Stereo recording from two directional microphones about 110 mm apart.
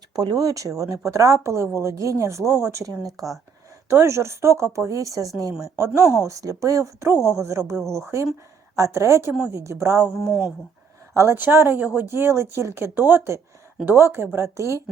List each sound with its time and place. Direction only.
0.2 s speech: 35° right (ahead or behind)
10.0 s speech: 5° right (ahead or behind)
11.1 s speech: 25° right (ahead or behind)